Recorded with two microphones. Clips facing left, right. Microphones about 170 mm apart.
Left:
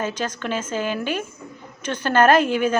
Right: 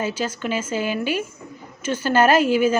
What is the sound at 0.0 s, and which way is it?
A woman's voice, 10° right (ahead or behind).